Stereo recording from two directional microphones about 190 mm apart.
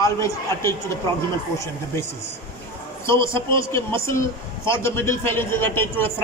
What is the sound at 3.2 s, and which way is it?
A man's voice, 15° left (ahead or behind).